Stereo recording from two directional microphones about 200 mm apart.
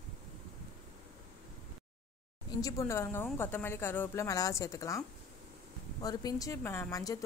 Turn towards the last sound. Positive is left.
turn(degrees=15)  # may be behind; listen again after turning